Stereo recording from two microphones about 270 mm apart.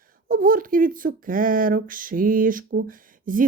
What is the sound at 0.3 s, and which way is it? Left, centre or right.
Speech, right.